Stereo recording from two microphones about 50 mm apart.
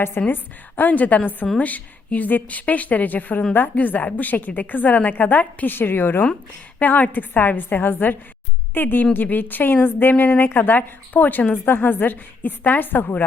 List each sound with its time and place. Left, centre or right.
0.2 s a woman's voice: left
0.8 s a woman's voice: left
5.7 s a woman's voice: left
6.7 s a woman's voice: left